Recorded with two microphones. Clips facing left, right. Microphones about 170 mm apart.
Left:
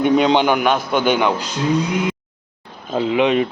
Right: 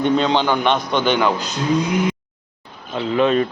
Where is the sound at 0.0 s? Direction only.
15° left (ahead or behind).